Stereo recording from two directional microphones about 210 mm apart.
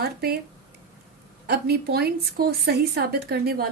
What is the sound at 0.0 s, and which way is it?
Speech, 50° right (ahead or behind).